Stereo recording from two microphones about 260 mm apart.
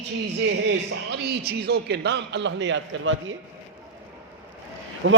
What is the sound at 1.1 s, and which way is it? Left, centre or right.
A man's voice, right.